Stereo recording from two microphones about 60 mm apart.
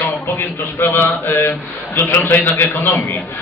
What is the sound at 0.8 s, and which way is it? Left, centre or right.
A man's voice, left.